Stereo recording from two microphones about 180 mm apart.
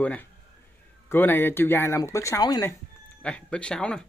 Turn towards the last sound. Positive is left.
turn(degrees=5)  # may be behind; listen again after turning